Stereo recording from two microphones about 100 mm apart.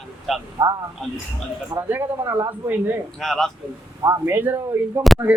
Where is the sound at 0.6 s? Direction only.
40° right (ahead or behind).